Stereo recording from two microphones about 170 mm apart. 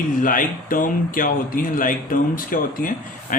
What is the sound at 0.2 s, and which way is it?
A man's voice, 50° left (ahead or behind).